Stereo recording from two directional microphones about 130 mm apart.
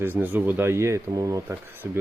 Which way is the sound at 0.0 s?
15° right (ahead or behind).